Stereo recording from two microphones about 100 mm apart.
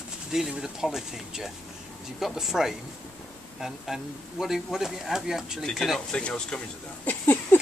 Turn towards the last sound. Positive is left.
turn(degrees=15)  # may be behind; listen again after turning